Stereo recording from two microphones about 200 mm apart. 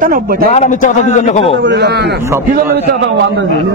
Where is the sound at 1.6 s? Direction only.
55° right (ahead or behind).